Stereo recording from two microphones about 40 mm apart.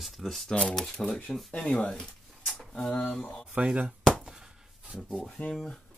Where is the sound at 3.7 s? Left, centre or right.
Right.